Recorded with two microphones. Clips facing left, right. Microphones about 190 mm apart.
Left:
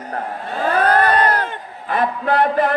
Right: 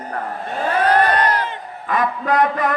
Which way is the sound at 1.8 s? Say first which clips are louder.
Left 1 dB; 30° left (ahead or behind).